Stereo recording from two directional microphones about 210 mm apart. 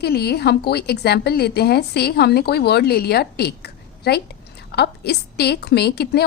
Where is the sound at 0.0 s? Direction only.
50° left (ahead or behind).